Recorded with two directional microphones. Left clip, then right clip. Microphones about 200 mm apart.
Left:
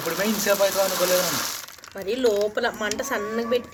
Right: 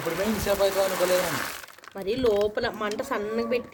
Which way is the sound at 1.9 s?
25° right (ahead or behind).